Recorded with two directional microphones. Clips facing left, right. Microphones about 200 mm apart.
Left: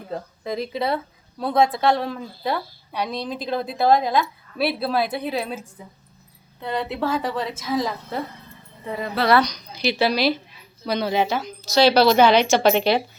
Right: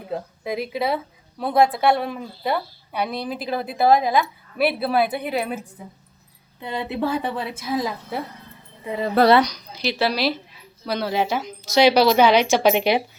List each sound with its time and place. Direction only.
0.1 s a woman's voice: 5° right (ahead or behind)
6.6 s speech: 15° right (ahead or behind)
9.2 s a woman's voice: 50° right (ahead or behind)
9.8 s a woman's voice: centre (ahead or behind)